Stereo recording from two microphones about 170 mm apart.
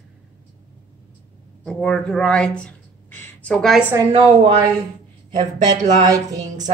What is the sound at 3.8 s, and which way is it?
Speech, 10° right (ahead or behind).